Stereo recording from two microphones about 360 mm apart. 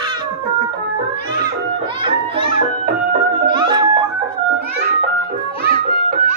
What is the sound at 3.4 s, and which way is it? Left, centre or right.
Music, centre.